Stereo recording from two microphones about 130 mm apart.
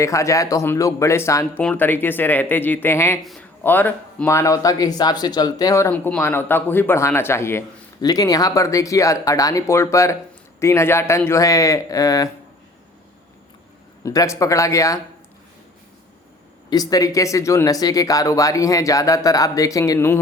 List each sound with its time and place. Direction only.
0.0 s speech: 25° left (ahead or behind)
5.9 s speech: 10° left (ahead or behind); by 12.3 s 25° left (ahead or behind)
14.0 s speech: 25° left (ahead or behind)
16.6 s speech: 30° left (ahead or behind)